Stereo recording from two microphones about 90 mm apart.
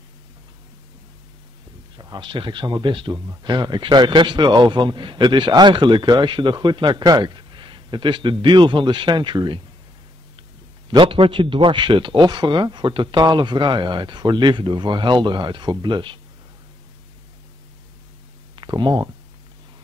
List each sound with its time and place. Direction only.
2.1 s a man's voice: 65° right (ahead or behind)
10.9 s a man's voice: 70° right (ahead or behind)
18.6 s speech: 60° right (ahead or behind)